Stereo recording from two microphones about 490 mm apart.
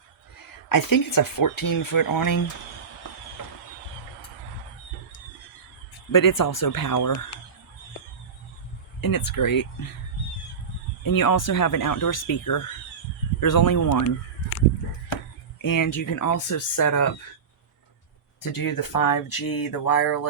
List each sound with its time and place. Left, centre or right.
0.7 s speech: left
6.1 s speech: left
9.0 s speech: left
11.0 s speech: left
15.6 s speech: left
18.5 s speech: left